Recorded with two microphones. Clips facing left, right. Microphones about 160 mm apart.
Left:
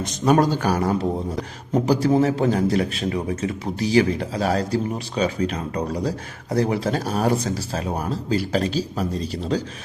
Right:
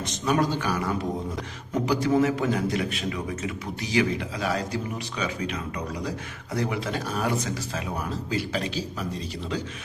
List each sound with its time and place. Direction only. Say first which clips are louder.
0.0 s a man's voice: left 6 dB; 40° left (ahead or behind)